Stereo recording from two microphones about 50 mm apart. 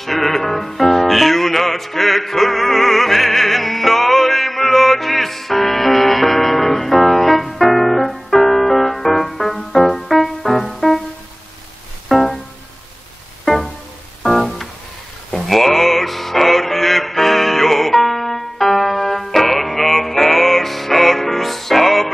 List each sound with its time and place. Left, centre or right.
0.0 s music: centre
12.1 s music: centre
14.2 s music: centre